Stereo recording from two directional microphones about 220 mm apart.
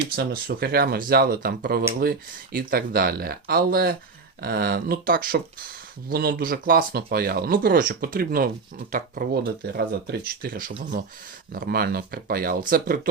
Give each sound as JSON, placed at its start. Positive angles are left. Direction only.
{"t": 0.2, "sound": "speech", "side_deg": -45}